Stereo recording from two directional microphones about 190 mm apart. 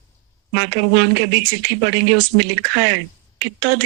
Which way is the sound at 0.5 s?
65° right (ahead or behind).